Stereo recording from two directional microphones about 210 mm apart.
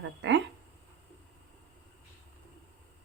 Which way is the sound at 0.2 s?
60° right (ahead or behind).